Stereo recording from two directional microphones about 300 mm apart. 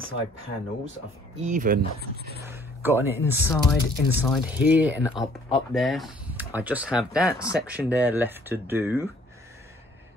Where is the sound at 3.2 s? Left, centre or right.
Centre.